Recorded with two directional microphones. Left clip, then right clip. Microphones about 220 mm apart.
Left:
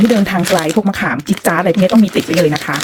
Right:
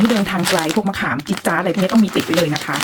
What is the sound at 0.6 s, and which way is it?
Speech, 35° left (ahead or behind).